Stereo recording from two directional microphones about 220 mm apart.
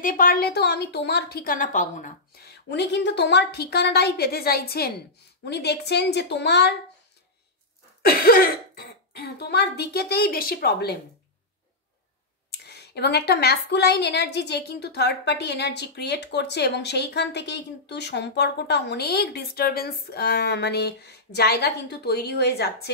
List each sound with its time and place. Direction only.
0.0 s a woman's voice: 40° left (ahead or behind)
8.0 s a woman's voice: 40° left (ahead or behind)
12.4 s a woman's voice: 50° left (ahead or behind)